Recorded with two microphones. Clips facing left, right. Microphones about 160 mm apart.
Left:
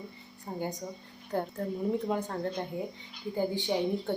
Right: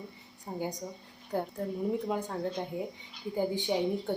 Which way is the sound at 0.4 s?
10° right (ahead or behind).